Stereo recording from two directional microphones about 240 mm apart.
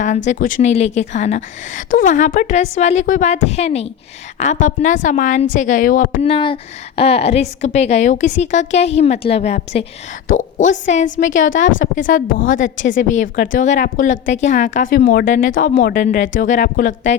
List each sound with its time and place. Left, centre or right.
0.3 s a woman's voice: left
6.2 s a woman's voice: left
11.3 s a woman's voice: left
11.8 s a woman's voice: left